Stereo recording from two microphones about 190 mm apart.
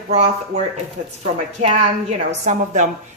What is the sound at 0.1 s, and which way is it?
Speech, 35° right (ahead or behind).